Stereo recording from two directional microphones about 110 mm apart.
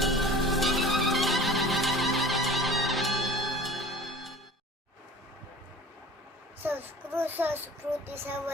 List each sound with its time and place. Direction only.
0.0 s music: centre (ahead or behind)
6.6 s child singing: 20° right (ahead or behind)
8.1 s music: 20° right (ahead or behind)